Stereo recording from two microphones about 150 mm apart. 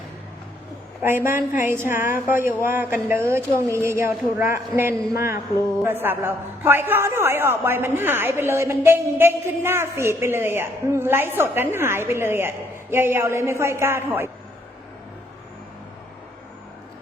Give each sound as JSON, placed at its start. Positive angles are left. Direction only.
{"t": 1.0, "sound": "a man's voice", "side_deg": -15}